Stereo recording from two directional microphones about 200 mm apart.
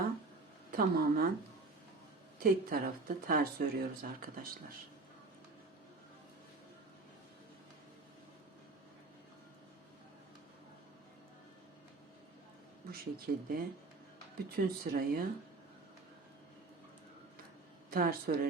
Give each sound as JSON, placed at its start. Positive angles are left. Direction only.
{"t": 0.7, "sound": "speech", "side_deg": -45}
{"t": 2.4, "sound": "speech", "side_deg": -45}
{"t": 12.9, "sound": "speech", "side_deg": -50}
{"t": 17.9, "sound": "speech", "side_deg": -45}